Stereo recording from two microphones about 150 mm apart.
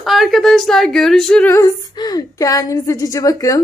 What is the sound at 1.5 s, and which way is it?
A woman's voice, 25° left (ahead or behind).